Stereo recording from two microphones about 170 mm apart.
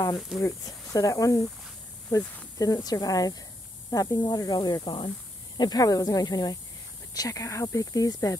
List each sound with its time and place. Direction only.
0.4 s speech: 20° left (ahead or behind)